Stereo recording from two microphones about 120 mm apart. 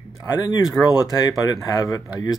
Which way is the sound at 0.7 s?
30° left (ahead or behind).